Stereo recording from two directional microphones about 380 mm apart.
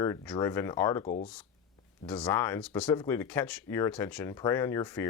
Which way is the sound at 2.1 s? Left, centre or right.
Centre.